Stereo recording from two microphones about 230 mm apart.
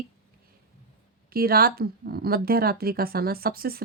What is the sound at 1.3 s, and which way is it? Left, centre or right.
Speech, right.